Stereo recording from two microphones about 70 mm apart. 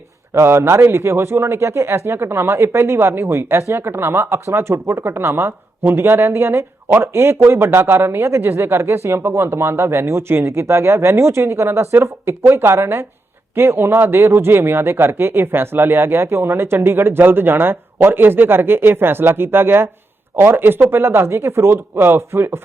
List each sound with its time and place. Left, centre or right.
0.3 s a man's voice: right